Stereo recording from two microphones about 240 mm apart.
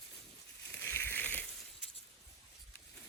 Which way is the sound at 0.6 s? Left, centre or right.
Centre.